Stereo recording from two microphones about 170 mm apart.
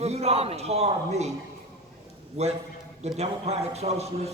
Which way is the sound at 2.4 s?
40° right (ahead or behind).